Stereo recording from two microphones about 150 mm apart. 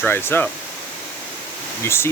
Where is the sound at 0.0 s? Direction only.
15° left (ahead or behind).